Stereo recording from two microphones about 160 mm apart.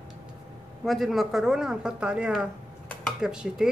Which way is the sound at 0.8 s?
Centre (ahead or behind).